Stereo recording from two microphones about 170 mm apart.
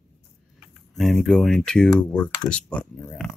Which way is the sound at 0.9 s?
Centre (ahead or behind).